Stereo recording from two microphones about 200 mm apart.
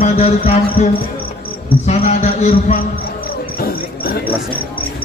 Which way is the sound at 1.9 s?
35° left (ahead or behind).